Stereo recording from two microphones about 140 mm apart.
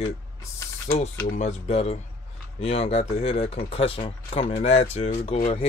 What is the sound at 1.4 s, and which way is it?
Speech, 50° left (ahead or behind).